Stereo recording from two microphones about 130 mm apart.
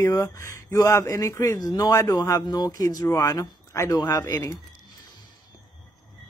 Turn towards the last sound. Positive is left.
turn(degrees=30)  # may be behind; listen again after turning